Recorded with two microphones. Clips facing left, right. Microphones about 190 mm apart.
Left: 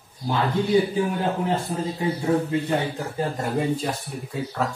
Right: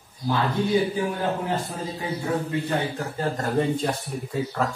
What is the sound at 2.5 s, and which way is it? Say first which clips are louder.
Speech: left 2 dB; 15° left (ahead or behind).